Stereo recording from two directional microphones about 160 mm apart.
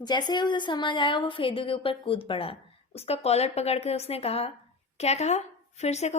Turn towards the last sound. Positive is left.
turn(degrees=45)  # may be behind; listen again after turning